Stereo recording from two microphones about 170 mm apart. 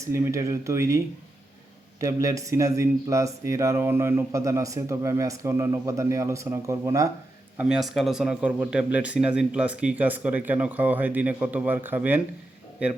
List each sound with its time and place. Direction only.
0.1 s speech: 15° right (ahead or behind)
7.5 s speech: 5° right (ahead or behind)